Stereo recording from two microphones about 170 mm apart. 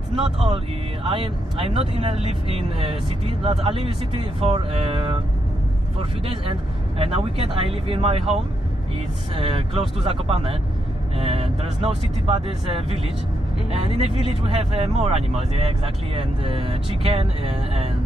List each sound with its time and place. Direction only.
1.0 s speech: 35° right (ahead or behind)